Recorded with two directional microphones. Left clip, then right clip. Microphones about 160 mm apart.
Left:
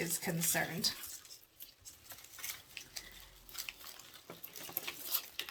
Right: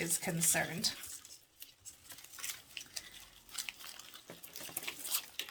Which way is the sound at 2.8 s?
Centre (ahead or behind).